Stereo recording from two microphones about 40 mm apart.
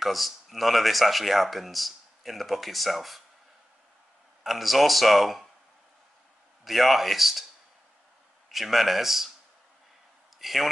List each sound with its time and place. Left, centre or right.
0.0 s speech: centre
4.4 s speech: centre
6.6 s speech: centre
8.5 s speech: centre
10.4 s speech: centre